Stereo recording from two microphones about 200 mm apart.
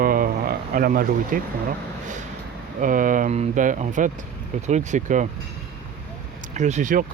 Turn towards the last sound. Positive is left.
turn(degrees=-40)  # may be behind; listen again after turning